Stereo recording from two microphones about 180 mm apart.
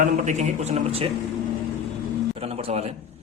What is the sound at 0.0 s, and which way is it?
A man's voice, 40° right (ahead or behind).